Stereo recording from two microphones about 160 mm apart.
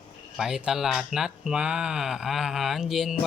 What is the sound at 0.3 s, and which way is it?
Speech, 5° right (ahead or behind).